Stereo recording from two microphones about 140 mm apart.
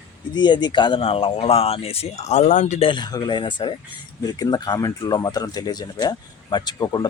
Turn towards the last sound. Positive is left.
turn(degrees=30)  # may be behind; listen again after turning